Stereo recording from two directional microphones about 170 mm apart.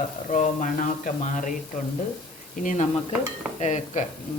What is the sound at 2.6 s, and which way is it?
Speech, 45° left (ahead or behind).